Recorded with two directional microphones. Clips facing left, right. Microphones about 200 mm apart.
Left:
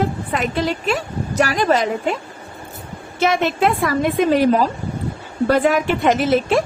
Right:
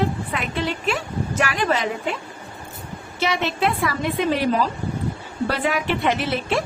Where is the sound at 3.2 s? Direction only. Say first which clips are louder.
Left 5 dB; 50° left (ahead or behind).